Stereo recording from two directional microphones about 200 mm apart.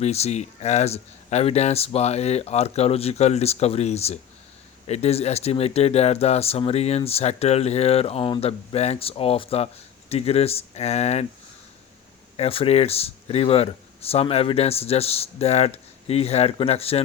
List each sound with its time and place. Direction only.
0.0 s speech: 30° left (ahead or behind)
12.4 s speech: 30° left (ahead or behind)